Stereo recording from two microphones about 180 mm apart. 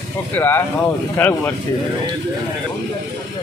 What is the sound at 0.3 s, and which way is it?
Speech, 10° left (ahead or behind).